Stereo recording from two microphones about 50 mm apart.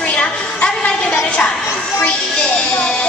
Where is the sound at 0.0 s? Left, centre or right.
Left.